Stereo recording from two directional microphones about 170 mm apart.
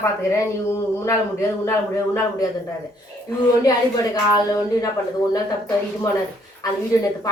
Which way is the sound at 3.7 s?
20° left (ahead or behind).